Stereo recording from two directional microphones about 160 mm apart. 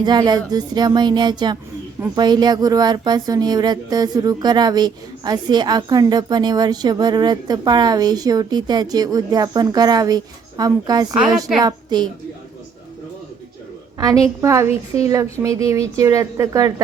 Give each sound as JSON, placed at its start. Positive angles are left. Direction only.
{"t": 0.0, "sound": "a woman's voice", "side_deg": -25}
{"t": 14.0, "sound": "speech", "side_deg": -20}